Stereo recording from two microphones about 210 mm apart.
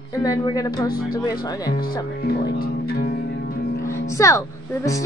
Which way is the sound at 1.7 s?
45° left (ahead or behind).